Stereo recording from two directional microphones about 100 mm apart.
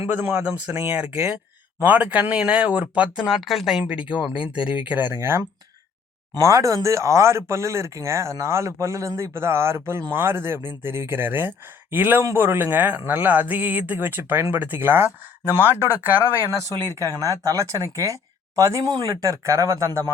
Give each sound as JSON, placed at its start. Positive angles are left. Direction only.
{"t": 0.0, "sound": "speech", "side_deg": -20}
{"t": 0.9, "sound": "speech", "side_deg": -15}
{"t": 3.2, "sound": "speech", "side_deg": 0}
{"t": 3.8, "sound": "speech", "side_deg": -10}
{"t": 16.5, "sound": "speech", "side_deg": -35}